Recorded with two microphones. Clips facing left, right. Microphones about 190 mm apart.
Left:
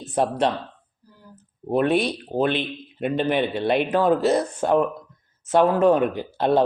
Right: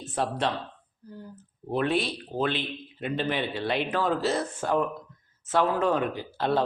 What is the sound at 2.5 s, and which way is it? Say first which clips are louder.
Speech: left 6 dB; 60° left (ahead or behind).